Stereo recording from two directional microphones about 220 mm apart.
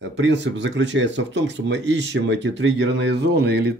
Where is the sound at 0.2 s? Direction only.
55° right (ahead or behind).